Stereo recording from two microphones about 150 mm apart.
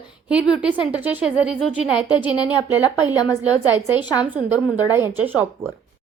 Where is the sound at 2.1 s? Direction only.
35° left (ahead or behind).